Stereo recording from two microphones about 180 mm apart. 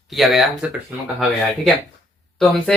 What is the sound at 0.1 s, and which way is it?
Speech, centre (ahead or behind).